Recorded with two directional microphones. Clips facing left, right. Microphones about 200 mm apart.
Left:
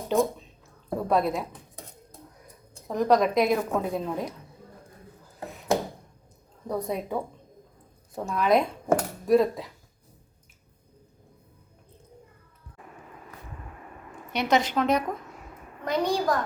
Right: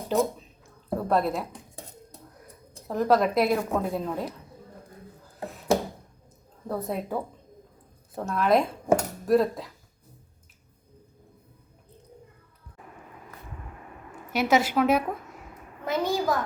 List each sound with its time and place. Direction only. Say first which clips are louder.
0.1 s speech: left 1 dB; 5° right (ahead or behind)
0.9 s a sound: even; centre (ahead or behind)
2.8 s a woman's voice: even; 5° right (ahead or behind)
6.7 s a woman's voice: left 1 dB; 5° right (ahead or behind)
14.3 s a woman's voice: right 1 dB; 5° right (ahead or behind)